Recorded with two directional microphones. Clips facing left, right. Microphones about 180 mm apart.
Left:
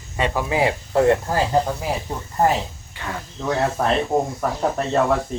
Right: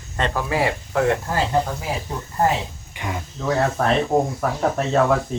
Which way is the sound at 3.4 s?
Centre (ahead or behind).